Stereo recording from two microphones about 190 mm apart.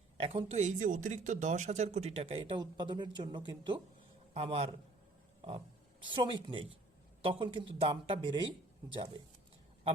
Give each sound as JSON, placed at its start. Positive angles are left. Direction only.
{"t": 0.2, "sound": "speech", "side_deg": -30}
{"t": 6.0, "sound": "speech", "side_deg": -25}